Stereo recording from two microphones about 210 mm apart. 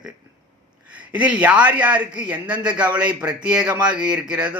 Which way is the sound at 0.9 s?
5° right (ahead or behind).